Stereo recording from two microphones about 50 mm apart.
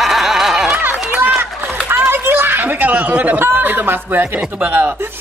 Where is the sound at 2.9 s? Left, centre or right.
Right.